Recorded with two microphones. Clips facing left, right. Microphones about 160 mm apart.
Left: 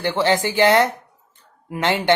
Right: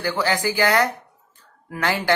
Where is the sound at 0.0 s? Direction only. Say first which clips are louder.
Left 3 dB; 25° left (ahead or behind).